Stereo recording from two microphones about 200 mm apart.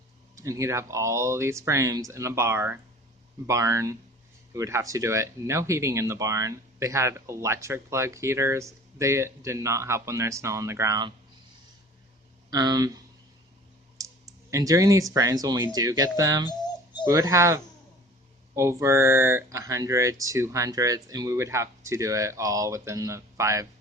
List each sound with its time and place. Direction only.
0.3 s speech: 15° right (ahead or behind)
12.5 s speech: 20° right (ahead or behind)
14.0 s clicking: 15° right (ahead or behind)
14.5 s speech: 15° right (ahead or behind)
16.5 s bird: 20° left (ahead or behind)
17.1 s speech: 15° right (ahead or behind)